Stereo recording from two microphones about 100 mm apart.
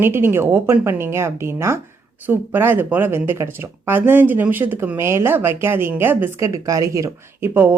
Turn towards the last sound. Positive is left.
turn(degrees=-20)  # may be behind; listen again after turning